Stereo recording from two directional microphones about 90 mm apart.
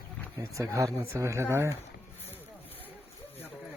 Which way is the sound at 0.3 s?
40° right (ahead or behind).